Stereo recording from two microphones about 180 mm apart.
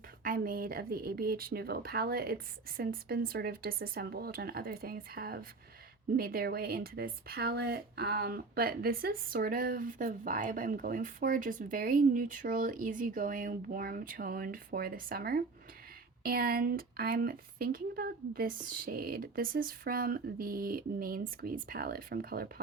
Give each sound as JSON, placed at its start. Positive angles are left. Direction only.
{"t": 0.3, "sound": "speech", "side_deg": -55}